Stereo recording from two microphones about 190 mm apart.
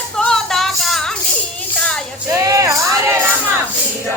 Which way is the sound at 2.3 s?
15° right (ahead or behind).